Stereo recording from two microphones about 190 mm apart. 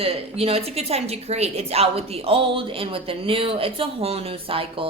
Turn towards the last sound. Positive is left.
turn(degrees=-30)  # may be behind; listen again after turning